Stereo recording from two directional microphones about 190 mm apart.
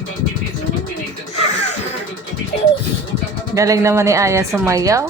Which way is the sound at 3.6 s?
15° right (ahead or behind).